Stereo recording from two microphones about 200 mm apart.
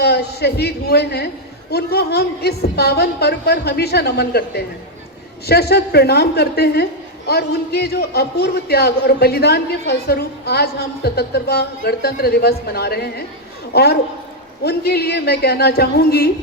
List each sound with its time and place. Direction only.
0.0 s a man's voice: 55° left (ahead or behind)